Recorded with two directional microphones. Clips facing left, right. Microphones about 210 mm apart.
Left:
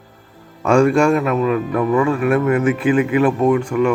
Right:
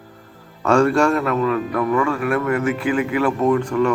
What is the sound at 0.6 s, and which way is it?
A man's voice, 10° left (ahead or behind).